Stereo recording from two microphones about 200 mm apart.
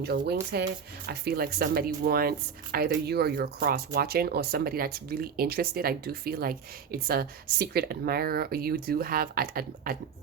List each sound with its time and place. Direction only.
0.0 s speech: 55° right (ahead or behind)